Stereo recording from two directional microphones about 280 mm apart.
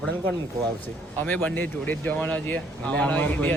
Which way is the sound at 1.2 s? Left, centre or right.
Centre.